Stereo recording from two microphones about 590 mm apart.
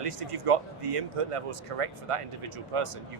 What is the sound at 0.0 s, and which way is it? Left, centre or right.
Speech, right.